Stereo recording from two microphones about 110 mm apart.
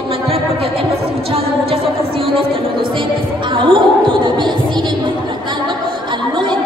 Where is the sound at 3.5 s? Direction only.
50° right (ahead or behind).